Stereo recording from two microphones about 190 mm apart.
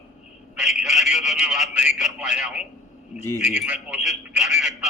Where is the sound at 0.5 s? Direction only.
5° right (ahead or behind).